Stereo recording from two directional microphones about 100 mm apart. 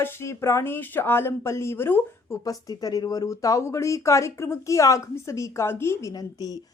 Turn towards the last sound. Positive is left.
turn(degrees=40)  # may be behind; listen again after turning